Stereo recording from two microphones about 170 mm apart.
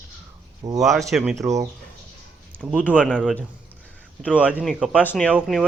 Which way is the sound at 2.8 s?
10° left (ahead or behind).